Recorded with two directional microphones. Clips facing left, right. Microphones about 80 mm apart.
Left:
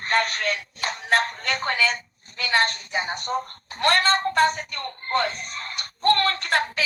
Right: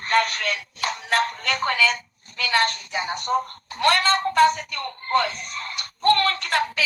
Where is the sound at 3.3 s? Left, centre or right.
Right.